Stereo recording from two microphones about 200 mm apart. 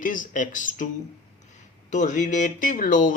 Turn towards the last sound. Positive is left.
turn(degrees=40)  # may be behind; listen again after turning